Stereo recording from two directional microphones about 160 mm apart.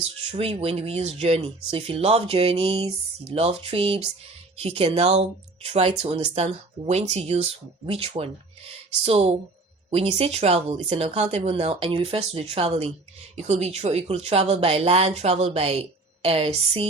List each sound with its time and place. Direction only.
0.0 s speech: 35° right (ahead or behind)